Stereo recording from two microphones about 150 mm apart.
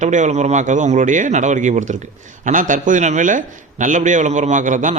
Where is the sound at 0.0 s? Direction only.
55° right (ahead or behind).